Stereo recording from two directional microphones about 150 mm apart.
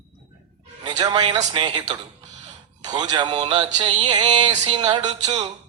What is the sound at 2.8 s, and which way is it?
A man's voice, 25° right (ahead or behind).